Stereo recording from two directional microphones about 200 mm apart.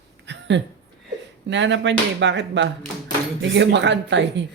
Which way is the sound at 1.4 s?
65° right (ahead or behind).